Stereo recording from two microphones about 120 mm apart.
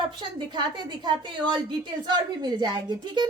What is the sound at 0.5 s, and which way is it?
A woman's voice, 40° right (ahead or behind).